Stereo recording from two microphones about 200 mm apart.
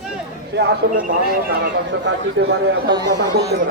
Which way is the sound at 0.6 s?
50° right (ahead or behind).